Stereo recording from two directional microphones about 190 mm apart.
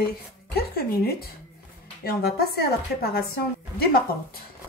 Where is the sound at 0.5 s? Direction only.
55° left (ahead or behind).